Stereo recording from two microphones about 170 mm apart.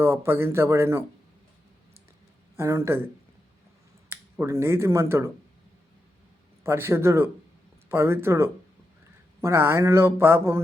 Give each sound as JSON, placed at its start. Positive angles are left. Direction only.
{"t": 0.0, "sound": "speech", "side_deg": -15}
{"t": 2.6, "sound": "speech", "side_deg": -15}
{"t": 4.1, "sound": "speech", "side_deg": -15}
{"t": 6.6, "sound": "speech", "side_deg": -15}